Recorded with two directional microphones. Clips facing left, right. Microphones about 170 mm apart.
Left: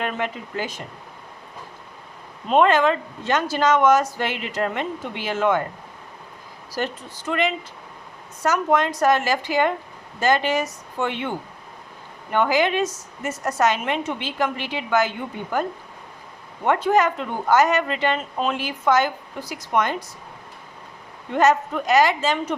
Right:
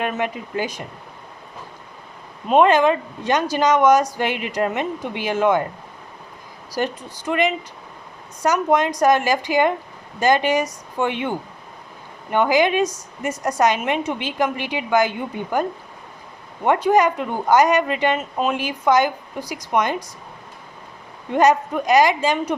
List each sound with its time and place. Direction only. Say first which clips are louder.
0.0 s speech: right 3 dB; 15° right (ahead or behind)
2.5 s speech: right 2 dB; 15° right (ahead or behind)
6.7 s speech: right 3 dB; 15° right (ahead or behind)
16.6 s speech: right 3 dB; 15° right (ahead or behind)
21.3 s speech: right 2 dB; 15° right (ahead or behind)